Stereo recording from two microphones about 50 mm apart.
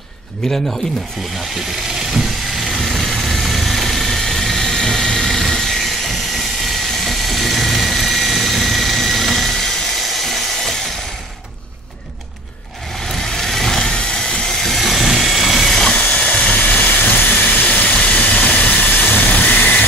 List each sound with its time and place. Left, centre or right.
0.4 s speech: centre
2.0 s vehicle: centre
10.0 s a sound: centre
13.1 s vehicle: centre
14.8 s vehicle: centre
15.9 s engine: left
16.5 s vehicle: left